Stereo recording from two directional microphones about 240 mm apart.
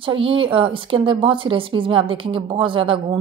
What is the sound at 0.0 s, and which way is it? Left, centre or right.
A woman's voice, right.